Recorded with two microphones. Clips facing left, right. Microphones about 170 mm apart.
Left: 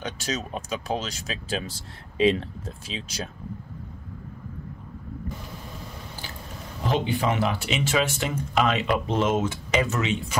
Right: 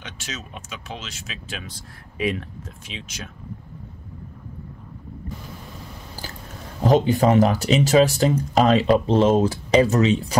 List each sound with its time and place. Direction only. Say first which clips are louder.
0.0 s speech: left 6 dB; 35° left (ahead or behind)
6.8 s speech: right 8 dB; 40° right (ahead or behind)